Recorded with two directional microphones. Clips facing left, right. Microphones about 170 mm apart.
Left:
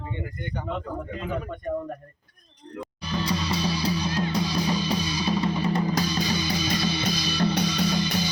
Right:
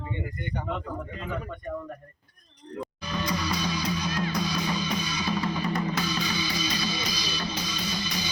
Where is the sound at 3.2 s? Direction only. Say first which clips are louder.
Left 2 dB; 30° left (ahead or behind).